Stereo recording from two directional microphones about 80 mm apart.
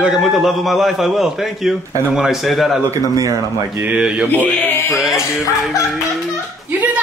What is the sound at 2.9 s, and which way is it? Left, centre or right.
Speech, right.